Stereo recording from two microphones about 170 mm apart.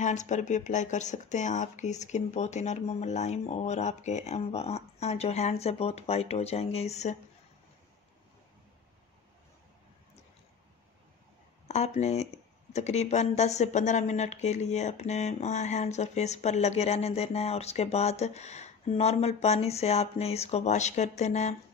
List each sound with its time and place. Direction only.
0.0 s speech: 45° left (ahead or behind)
11.6 s speech: 40° left (ahead or behind)